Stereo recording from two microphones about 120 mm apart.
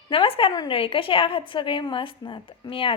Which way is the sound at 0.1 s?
50° left (ahead or behind).